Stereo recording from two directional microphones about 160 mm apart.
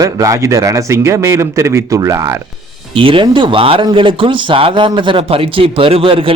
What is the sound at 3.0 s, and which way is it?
Speech, 35° right (ahead or behind).